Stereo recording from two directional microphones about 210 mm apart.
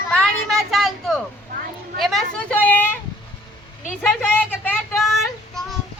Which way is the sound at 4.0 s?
10° left (ahead or behind).